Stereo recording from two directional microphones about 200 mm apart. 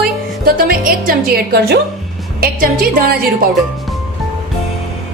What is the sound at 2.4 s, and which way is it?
Speech, 50° right (ahead or behind).